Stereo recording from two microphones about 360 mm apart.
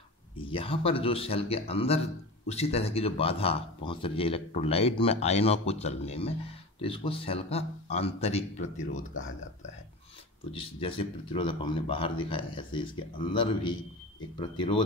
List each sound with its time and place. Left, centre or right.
0.4 s a man's voice: centre
10.5 s a man's voice: centre